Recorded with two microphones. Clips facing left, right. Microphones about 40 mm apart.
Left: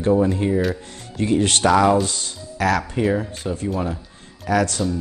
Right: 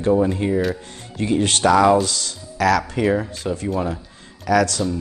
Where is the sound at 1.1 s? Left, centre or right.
Right.